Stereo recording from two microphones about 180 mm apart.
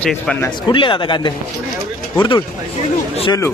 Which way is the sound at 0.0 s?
5° left (ahead or behind).